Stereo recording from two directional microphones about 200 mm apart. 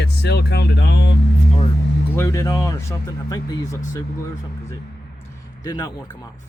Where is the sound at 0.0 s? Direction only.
55° left (ahead or behind).